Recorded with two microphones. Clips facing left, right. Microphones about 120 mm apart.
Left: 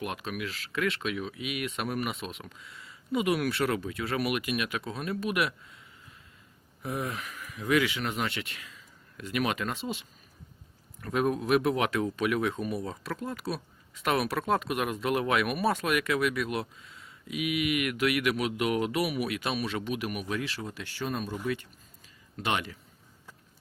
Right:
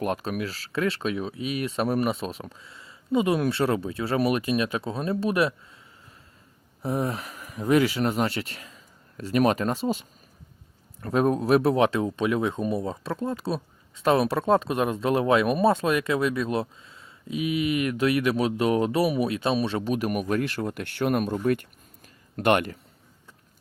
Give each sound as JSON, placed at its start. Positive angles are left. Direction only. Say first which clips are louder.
{"t": 0.0, "sound": "speech", "louder": "right 7 dB", "side_deg": -40}
{"t": 6.8, "sound": "speech", "louder": "right 6 dB", "side_deg": -35}